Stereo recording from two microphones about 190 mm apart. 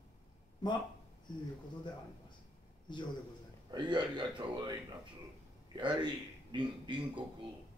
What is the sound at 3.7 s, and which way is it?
A man's voice, 25° right (ahead or behind).